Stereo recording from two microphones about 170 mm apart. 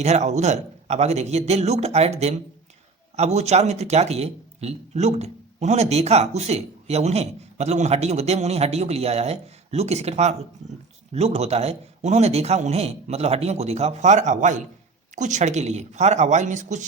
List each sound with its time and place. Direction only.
0.0 s speech: 40° right (ahead or behind)